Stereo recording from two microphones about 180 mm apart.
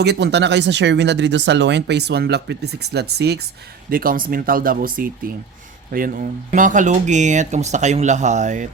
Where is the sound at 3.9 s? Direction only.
55° right (ahead or behind).